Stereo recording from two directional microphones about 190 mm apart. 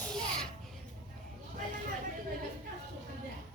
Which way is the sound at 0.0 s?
5° left (ahead or behind).